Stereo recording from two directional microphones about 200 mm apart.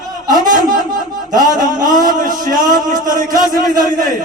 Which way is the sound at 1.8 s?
40° right (ahead or behind).